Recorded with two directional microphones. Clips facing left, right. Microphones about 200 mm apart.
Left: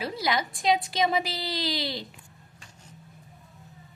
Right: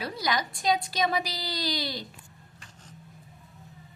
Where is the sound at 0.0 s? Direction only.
25° left (ahead or behind).